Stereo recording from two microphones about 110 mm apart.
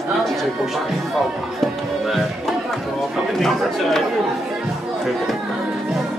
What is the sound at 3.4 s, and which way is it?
Speech, 5° left (ahead or behind).